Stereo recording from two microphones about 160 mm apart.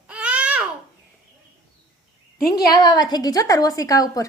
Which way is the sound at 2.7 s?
25° left (ahead or behind).